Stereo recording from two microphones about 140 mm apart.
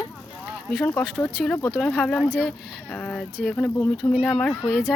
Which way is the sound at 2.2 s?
10° right (ahead or behind).